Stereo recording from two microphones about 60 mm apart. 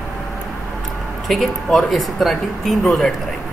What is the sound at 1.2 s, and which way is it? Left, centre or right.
Speech, centre.